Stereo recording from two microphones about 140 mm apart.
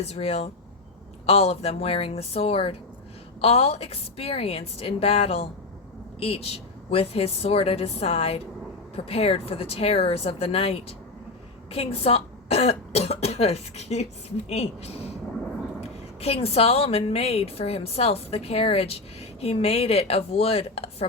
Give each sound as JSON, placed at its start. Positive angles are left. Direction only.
{"t": 0.0, "sound": "a woman's voice", "side_deg": 45}